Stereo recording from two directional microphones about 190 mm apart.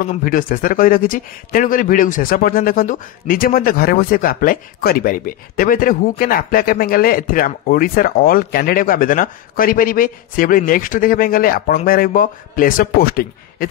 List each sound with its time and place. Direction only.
0.0 s a man's voice: 45° left (ahead or behind)